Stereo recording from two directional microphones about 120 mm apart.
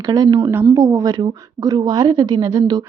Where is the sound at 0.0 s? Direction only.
30° right (ahead or behind).